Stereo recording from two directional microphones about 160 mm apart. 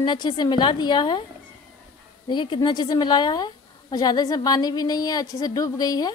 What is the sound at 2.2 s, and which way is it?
A woman's voice, 30° left (ahead or behind).